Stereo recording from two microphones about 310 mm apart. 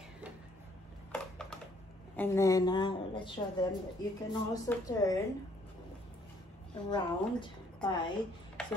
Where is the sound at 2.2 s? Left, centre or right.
Centre.